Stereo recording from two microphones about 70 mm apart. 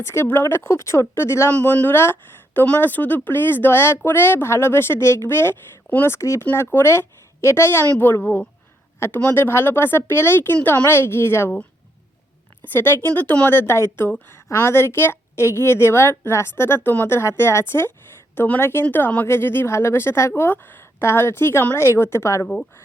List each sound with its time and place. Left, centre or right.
0.0 s speech: left
1.5 s a woman's voice: left
6.4 s speech: left
7.9 s a woman's voice: left
9.0 s speech: left
12.7 s speech: left
18.3 s a woman's voice: left
18.6 s speech: left